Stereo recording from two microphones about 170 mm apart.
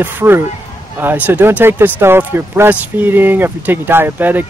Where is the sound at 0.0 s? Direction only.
15° right (ahead or behind).